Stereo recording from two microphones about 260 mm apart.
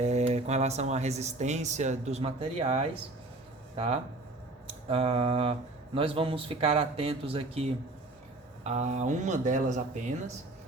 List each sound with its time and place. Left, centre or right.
0.0 s speech: right
4.6 s speech: right